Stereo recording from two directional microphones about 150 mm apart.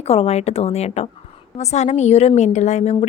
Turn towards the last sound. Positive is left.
turn(degrees=50)  # may be behind; listen again after turning